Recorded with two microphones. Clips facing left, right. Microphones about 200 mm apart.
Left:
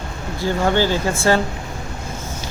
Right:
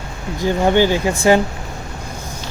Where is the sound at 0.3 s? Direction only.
15° right (ahead or behind).